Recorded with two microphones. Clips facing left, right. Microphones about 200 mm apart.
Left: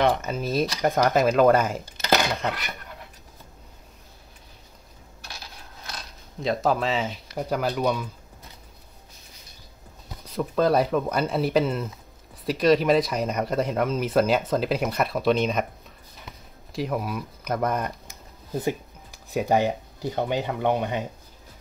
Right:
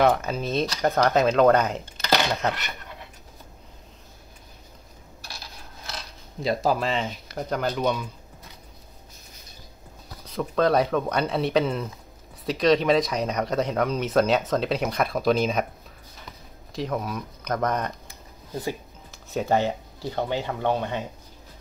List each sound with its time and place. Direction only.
0.0 s speech: centre (ahead or behind)
6.4 s speech: centre (ahead or behind)
10.2 s speech: 5° left (ahead or behind)
16.7 s speech: 5° left (ahead or behind)
19.3 s speech: 15° left (ahead or behind)